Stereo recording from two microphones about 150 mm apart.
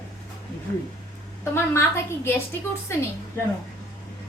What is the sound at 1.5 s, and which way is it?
Speech, 15° left (ahead or behind).